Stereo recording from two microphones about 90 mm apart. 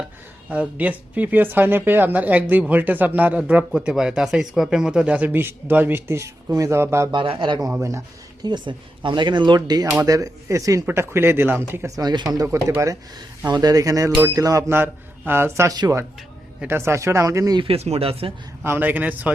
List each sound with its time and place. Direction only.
0.5 s speech: 15° right (ahead or behind)
3.7 s speech: 5° right (ahead or behind); by 7.1 s 30° right (ahead or behind)
7.1 s speech: 70° right (ahead or behind)
7.8 s speech: 35° right (ahead or behind)
8.4 s speech: 55° right (ahead or behind)
9.6 s speech: 45° right (ahead or behind); by 11.6 s 25° right (ahead or behind)
11.9 s speech: 50° right (ahead or behind)
12.5 s speech: 30° right (ahead or behind)
13.5 s speech: 45° right (ahead or behind)
15.3 s speech: 25° right (ahead or behind)
17.6 s speech: 90° right
18.6 s speech: 20° right (ahead or behind)